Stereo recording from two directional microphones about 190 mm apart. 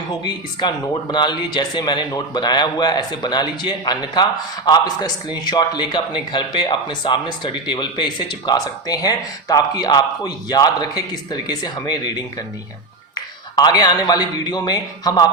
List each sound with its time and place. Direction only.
0.1 s a man's voice: 20° left (ahead or behind)